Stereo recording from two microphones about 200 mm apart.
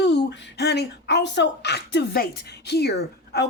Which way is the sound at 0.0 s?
60° left (ahead or behind).